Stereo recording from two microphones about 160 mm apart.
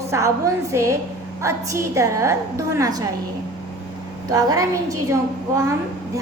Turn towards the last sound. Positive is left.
turn(degrees=-20)  # may be behind; listen again after turning